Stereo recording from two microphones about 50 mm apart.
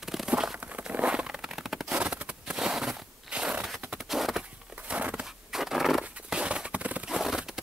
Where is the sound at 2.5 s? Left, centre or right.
Centre.